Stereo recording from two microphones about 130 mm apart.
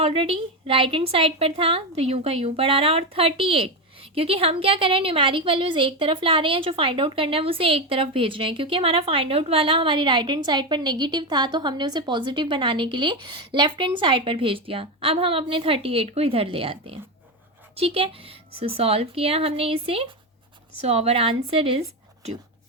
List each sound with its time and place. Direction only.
0.0 s a woman's voice: 50° right (ahead or behind)